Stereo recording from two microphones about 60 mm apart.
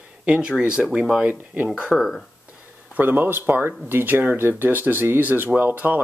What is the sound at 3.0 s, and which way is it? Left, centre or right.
Speech, right.